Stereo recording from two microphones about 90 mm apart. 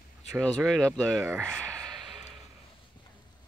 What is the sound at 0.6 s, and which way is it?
Speech, 5° left (ahead or behind).